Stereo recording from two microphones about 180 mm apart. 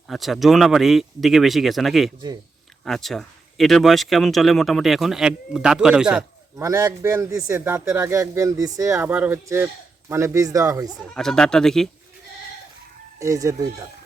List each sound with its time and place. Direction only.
0.1 s speech: centre (ahead or behind)
6.6 s a man's voice: 15° right (ahead or behind)
11.1 s speech: 5° left (ahead or behind)
13.1 s a man's voice: 15° right (ahead or behind)